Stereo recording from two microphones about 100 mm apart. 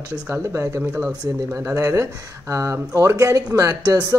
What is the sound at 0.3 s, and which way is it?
A woman's voice, 25° right (ahead or behind).